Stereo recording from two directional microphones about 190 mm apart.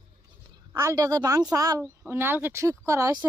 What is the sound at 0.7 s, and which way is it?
Speech, 20° right (ahead or behind).